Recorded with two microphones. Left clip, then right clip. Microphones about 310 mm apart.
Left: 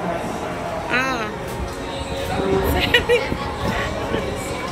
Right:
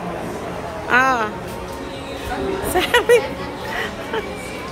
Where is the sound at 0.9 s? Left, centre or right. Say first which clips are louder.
Right 7 dB; centre.